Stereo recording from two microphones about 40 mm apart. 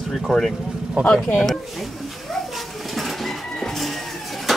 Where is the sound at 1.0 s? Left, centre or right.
Right.